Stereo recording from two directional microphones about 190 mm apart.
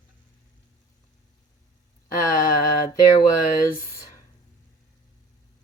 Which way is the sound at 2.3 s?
45° left (ahead or behind).